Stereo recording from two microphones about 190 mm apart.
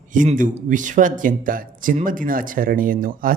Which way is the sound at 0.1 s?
45° right (ahead or behind).